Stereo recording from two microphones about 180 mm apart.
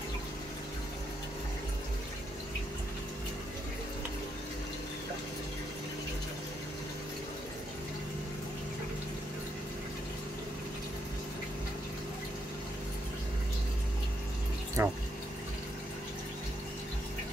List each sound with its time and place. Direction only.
14.8 s water: 15° right (ahead or behind)